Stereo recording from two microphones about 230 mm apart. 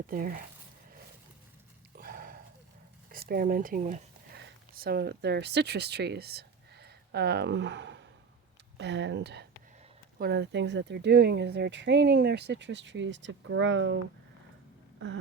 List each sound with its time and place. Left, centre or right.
0.1 s speech: right
2.0 s a sound: right
3.1 s speech: right